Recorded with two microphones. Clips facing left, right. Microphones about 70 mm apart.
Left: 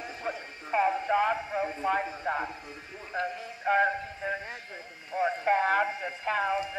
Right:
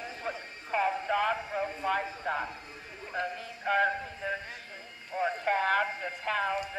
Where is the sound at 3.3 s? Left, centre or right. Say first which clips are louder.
Left 3 dB; centre.